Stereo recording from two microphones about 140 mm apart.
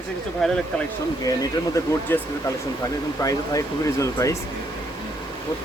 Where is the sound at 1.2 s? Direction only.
25° left (ahead or behind).